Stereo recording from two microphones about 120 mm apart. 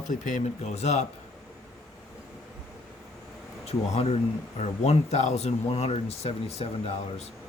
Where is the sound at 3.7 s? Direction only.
65° left (ahead or behind).